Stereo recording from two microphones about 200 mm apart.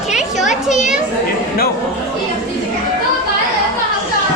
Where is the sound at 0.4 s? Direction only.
40° left (ahead or behind).